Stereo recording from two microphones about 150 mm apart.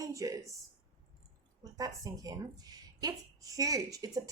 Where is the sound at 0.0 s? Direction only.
20° right (ahead or behind).